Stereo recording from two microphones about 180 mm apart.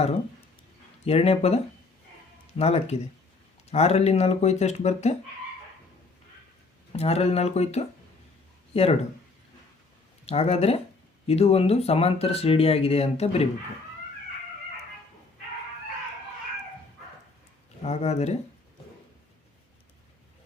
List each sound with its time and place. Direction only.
1.0 s speech: 35° left (ahead or behind)
6.9 s speech: 35° left (ahead or behind)
10.2 s speech: 35° left (ahead or behind)
17.8 s speech: 35° left (ahead or behind)